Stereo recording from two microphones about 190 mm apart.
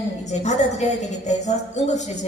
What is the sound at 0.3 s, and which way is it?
A woman's voice, 35° left (ahead or behind).